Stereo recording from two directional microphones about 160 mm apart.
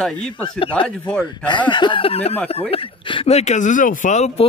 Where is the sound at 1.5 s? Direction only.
30° left (ahead or behind).